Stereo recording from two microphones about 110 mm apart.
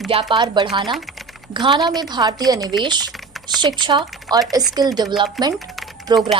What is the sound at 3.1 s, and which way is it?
Typing, centre (ahead or behind).